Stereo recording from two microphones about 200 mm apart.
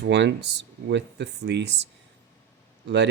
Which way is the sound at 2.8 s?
60° right (ahead or behind).